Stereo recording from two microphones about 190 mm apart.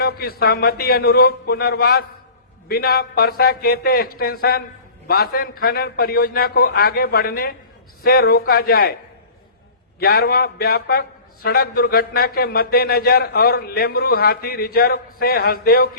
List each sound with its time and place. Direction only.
0.0 s a man's voice: 55° left (ahead or behind)
10.0 s a man's voice: 55° left (ahead or behind)